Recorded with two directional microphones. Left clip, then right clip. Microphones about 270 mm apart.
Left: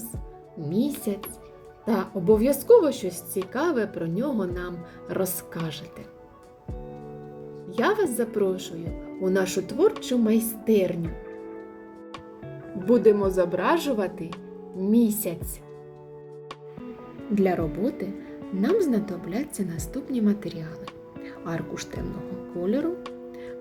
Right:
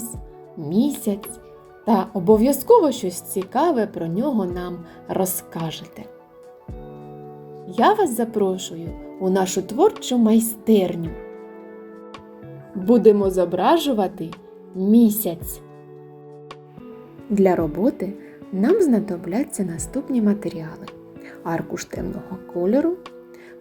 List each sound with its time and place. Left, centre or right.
0.7 s a woman's voice: centre
7.7 s a woman's voice: centre
12.9 s a woman's voice: centre
14.3 s music: centre
15.0 s a woman's voice: centre
17.3 s a woman's voice: centre